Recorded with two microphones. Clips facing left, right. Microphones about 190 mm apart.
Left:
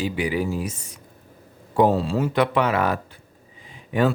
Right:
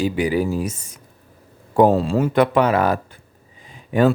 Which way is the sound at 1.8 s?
50° right (ahead or behind).